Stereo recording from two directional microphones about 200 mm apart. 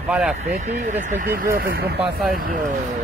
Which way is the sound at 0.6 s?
35° right (ahead or behind).